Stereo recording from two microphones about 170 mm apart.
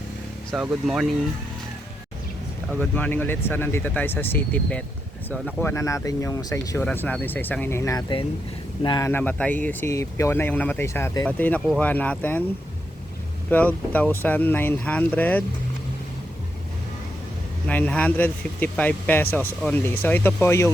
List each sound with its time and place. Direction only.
0.5 s speech: 5° right (ahead or behind)
2.9 s speech: 10° left (ahead or behind)
9.0 s speech: 10° left (ahead or behind)
13.5 s speech: 10° left (ahead or behind)
17.7 s speech: 10° left (ahead or behind)